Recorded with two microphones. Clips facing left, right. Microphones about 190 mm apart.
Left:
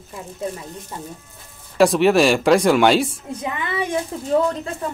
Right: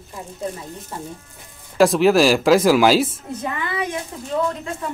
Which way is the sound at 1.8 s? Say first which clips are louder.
Even; centre (ahead or behind).